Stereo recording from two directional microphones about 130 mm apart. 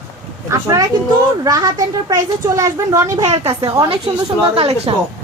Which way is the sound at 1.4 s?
30° right (ahead or behind).